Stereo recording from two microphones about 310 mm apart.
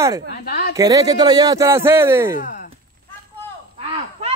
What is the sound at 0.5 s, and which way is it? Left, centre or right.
Speech, left.